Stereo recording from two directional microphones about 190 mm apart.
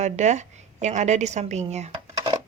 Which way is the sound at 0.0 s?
40° right (ahead or behind).